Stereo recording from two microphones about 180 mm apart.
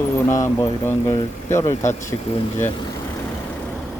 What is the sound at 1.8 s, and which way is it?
Speech, 40° left (ahead or behind).